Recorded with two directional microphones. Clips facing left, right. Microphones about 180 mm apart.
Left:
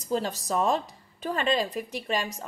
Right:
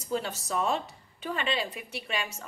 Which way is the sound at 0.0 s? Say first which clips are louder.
Left 3 dB; 35° left (ahead or behind).